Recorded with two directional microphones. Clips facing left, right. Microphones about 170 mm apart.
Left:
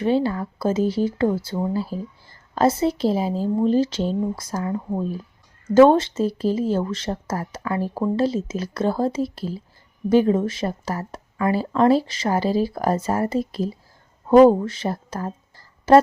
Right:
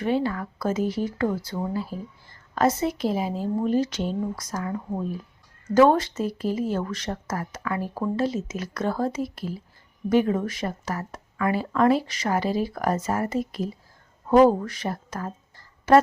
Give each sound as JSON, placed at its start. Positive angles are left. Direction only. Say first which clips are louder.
{"t": 0.0, "sound": "a woman's voice", "louder": "left 4 dB", "side_deg": 30}